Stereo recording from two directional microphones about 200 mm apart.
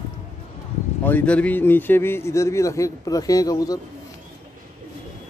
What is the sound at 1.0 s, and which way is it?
Speech, 10° left (ahead or behind).